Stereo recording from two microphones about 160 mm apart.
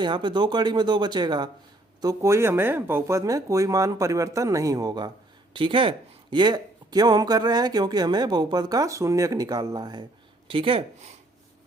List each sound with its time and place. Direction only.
0.0 s speech: 30° right (ahead or behind)